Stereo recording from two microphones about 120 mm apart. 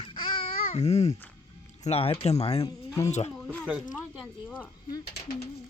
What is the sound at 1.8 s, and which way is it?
Speech, 55° left (ahead or behind).